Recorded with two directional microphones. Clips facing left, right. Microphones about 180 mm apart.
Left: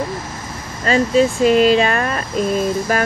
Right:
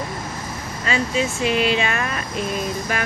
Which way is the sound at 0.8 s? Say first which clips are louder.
Left 8 dB; 40° left (ahead or behind).